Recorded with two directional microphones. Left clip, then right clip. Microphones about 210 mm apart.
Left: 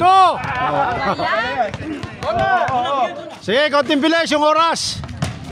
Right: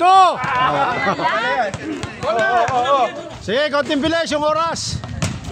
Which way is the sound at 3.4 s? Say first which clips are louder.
Left 3 dB; 30° left (ahead or behind).